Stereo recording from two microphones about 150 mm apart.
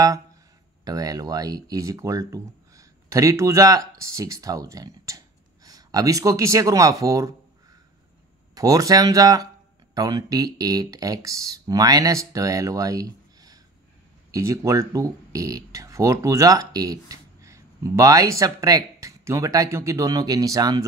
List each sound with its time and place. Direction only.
0.0 s speech: 25° right (ahead or behind)
8.5 s speech: 25° right (ahead or behind)